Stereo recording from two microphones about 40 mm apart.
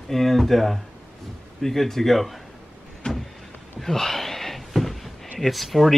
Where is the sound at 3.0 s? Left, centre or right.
Centre.